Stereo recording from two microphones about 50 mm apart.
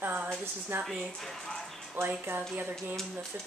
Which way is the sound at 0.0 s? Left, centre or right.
Right.